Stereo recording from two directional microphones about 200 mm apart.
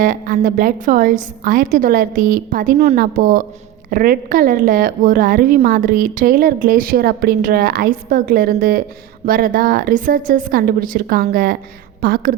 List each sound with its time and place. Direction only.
0.0 s a woman's voice: 45° right (ahead or behind)